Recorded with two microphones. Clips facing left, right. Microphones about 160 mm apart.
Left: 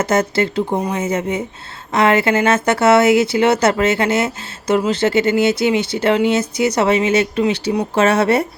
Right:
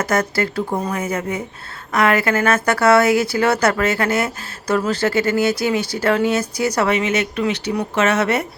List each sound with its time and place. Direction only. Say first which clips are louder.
0.0 s speech: left 3 dB; 25° left (ahead or behind)